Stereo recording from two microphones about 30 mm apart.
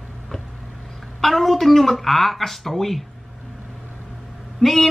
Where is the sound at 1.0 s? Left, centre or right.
Centre.